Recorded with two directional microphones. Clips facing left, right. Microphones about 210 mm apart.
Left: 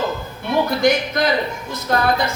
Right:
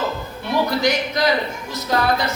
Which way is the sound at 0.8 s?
50° left (ahead or behind).